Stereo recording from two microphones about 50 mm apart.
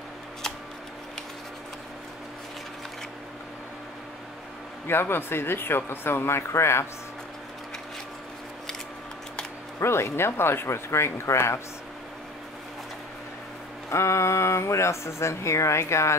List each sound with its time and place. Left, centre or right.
4.8 s speech: left
9.8 s speech: left
13.8 s speech: left